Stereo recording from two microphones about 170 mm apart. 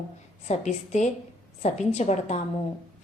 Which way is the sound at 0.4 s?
40° left (ahead or behind).